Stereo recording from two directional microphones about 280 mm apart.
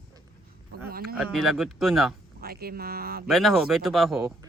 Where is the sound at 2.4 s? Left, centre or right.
Right.